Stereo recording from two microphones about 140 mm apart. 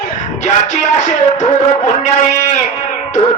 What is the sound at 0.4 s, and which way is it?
Music, 55° left (ahead or behind).